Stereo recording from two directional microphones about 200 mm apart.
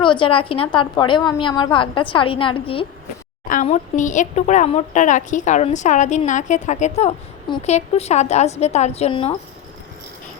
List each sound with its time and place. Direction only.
0.0 s a woman's voice: 25° left (ahead or behind)
3.5 s speech: 40° left (ahead or behind)